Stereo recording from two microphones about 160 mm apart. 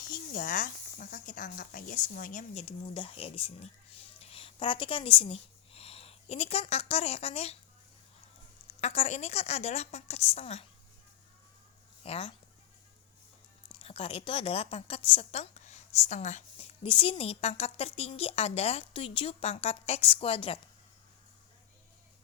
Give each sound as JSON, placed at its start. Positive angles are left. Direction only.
{"t": 0.1, "sound": "speech", "side_deg": 60}
{"t": 8.8, "sound": "a woman's voice", "side_deg": 40}
{"t": 12.0, "sound": "a woman's voice", "side_deg": 35}
{"t": 13.7, "sound": "a woman's voice", "side_deg": 35}